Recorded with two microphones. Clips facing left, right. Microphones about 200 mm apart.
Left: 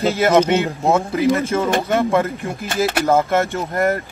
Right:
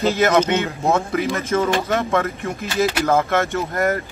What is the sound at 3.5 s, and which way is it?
Speech, 30° left (ahead or behind).